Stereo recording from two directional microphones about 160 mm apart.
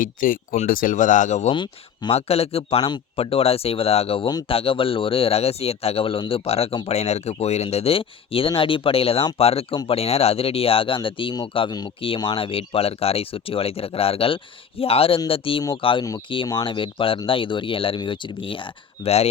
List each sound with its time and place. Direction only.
0.0 s speech: 60° left (ahead or behind)
1.5 s speech: 30° left (ahead or behind)
2.1 s speech: 40° left (ahead or behind)